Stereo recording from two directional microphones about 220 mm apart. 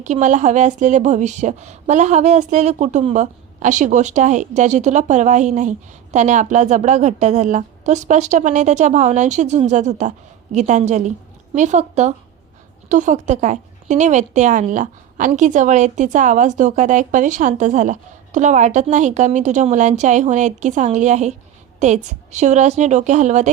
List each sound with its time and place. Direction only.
0.0 s a woman's voice: 35° right (ahead or behind)